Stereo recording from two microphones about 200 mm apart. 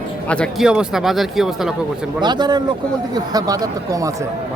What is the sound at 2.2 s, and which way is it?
A man's voice, 20° right (ahead or behind).